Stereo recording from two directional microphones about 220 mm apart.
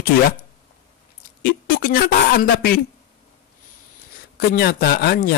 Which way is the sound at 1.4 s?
40° left (ahead or behind).